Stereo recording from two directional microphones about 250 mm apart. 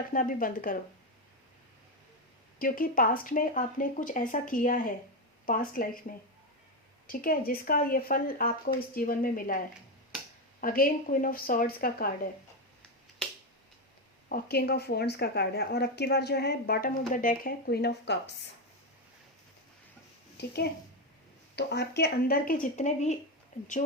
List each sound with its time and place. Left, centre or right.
0.1 s a woman's voice: left
2.6 s a woman's voice: left
14.3 s a woman's voice: left
20.4 s a woman's voice: left